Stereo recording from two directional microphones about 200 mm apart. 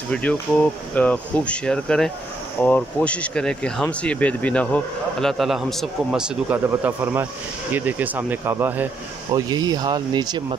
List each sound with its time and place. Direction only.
0.1 s speech: 5° left (ahead or behind); by 10.4 s 20° right (ahead or behind)